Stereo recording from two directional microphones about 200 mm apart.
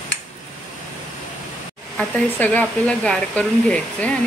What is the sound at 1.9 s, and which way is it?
Speech, 5° left (ahead or behind).